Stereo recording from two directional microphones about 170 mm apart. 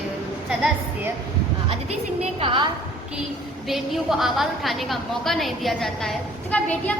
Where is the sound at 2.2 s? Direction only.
35° right (ahead or behind).